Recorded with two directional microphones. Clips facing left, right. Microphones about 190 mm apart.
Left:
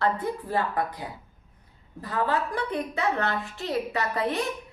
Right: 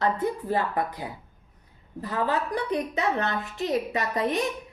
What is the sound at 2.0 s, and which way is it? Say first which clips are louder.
A woman's voice: even; 20° right (ahead or behind).